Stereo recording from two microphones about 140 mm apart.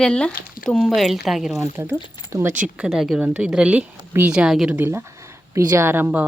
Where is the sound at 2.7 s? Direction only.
5° right (ahead or behind).